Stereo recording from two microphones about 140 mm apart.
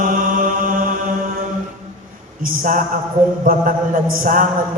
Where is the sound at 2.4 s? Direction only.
70° right (ahead or behind).